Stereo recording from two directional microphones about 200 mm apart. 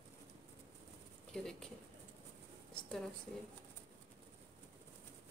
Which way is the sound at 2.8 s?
5° left (ahead or behind).